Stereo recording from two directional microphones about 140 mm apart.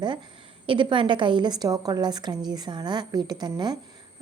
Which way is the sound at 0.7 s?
35° right (ahead or behind).